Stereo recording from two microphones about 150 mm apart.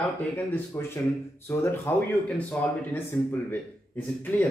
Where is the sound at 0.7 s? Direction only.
15° left (ahead or behind).